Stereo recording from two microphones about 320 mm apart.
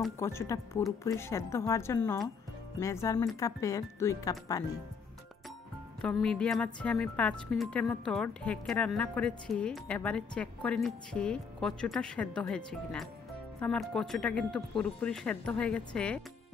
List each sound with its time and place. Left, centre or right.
0.0 s speech: centre
5.9 s speech: centre